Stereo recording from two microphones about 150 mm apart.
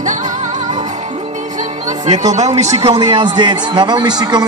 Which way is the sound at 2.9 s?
30° right (ahead or behind).